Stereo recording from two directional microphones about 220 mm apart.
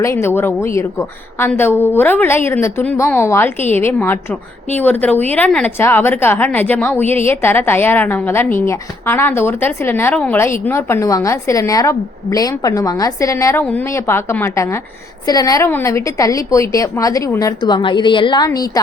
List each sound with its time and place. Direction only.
0.0 s a woman's voice: 10° left (ahead or behind)